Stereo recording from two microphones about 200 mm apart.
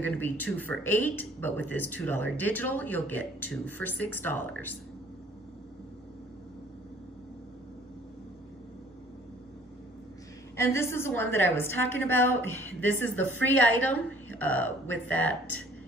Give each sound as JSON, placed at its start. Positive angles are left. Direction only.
{"t": 0.0, "sound": "a woman's voice", "side_deg": 10}
{"t": 10.5, "sound": "a woman's voice", "side_deg": 15}